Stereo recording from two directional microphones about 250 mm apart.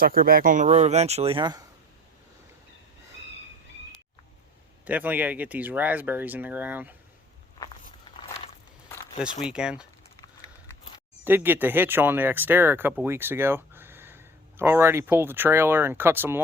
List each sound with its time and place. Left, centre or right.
0.0 s speech: right; by 1.6 s centre
4.9 s speech: centre
9.4 s speech: centre
11.3 s speech: centre